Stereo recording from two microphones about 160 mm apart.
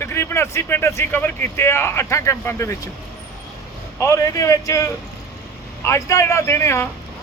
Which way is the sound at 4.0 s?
20° left (ahead or behind).